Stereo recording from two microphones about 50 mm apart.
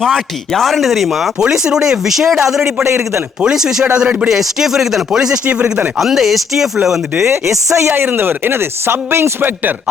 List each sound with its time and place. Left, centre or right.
0.0 s speech: centre
1.4 s speech: centre
4.3 s speech: centre
6.0 s speech: centre
7.3 s speech: right
8.0 s speech: right